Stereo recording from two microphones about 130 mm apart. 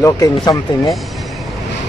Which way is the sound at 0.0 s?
25° left (ahead or behind).